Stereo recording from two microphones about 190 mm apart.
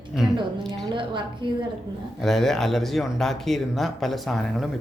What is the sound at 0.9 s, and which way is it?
Speech, 25° right (ahead or behind).